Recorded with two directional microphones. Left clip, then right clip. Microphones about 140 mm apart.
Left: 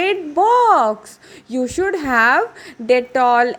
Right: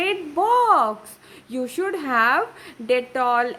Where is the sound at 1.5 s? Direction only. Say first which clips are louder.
Left 6 dB; 30° left (ahead or behind).